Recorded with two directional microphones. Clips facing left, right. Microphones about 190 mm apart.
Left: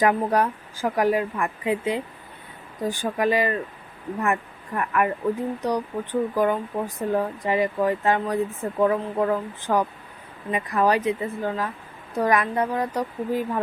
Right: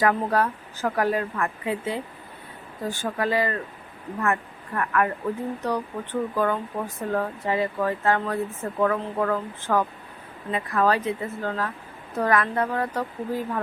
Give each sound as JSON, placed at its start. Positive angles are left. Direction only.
{"t": 0.0, "sound": "a woman's voice", "side_deg": 15}